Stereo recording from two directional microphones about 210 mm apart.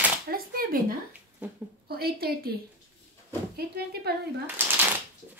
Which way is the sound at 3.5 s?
50° right (ahead or behind).